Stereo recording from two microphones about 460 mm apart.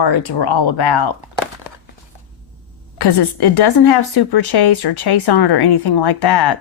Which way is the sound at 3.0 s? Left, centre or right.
Left.